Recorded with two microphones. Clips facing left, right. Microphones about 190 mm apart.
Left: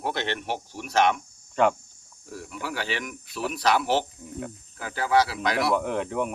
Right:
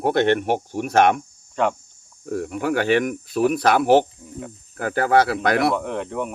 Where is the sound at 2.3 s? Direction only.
55° right (ahead or behind).